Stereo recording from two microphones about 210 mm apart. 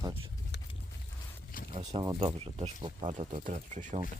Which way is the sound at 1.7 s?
25° right (ahead or behind).